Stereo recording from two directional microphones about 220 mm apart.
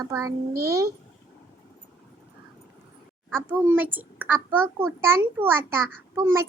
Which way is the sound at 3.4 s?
10° right (ahead or behind).